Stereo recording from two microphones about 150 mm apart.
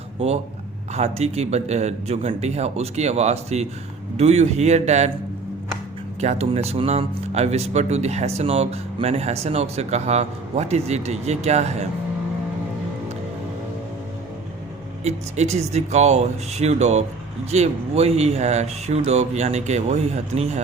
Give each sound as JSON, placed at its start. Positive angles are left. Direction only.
{"t": 0.9, "sound": "speech", "side_deg": -45}
{"t": 6.1, "sound": "speech", "side_deg": -45}
{"t": 15.0, "sound": "speech", "side_deg": -50}